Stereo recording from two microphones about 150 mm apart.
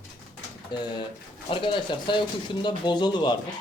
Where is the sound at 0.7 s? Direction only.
30° left (ahead or behind).